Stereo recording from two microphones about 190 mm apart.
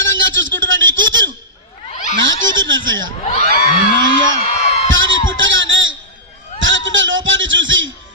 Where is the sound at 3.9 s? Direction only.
90° right.